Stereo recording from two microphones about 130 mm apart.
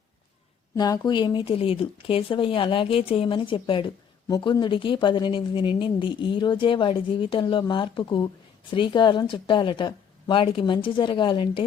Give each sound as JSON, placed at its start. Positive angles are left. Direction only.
{"t": 0.8, "sound": "speech", "side_deg": 35}
{"t": 4.3, "sound": "speech", "side_deg": 30}